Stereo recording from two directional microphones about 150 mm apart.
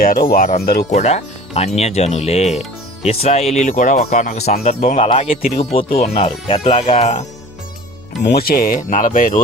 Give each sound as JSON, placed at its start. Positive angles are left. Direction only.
{"t": 0.0, "sound": "speech", "side_deg": 70}
{"t": 0.6, "sound": "speech", "side_deg": 90}
{"t": 0.9, "sound": "speech", "side_deg": 50}
{"t": 5.3, "sound": "speech", "side_deg": 75}
{"t": 5.5, "sound": "speech", "side_deg": 40}
{"t": 8.4, "sound": "speech", "side_deg": 75}